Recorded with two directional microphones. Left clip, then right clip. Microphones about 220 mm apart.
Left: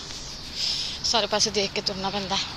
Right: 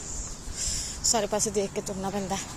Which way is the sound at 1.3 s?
5° right (ahead or behind).